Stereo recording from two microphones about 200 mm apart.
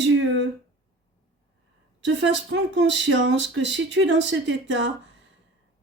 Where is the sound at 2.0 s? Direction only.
65° right (ahead or behind).